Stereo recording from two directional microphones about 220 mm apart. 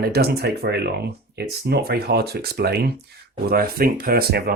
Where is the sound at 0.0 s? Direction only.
45° right (ahead or behind).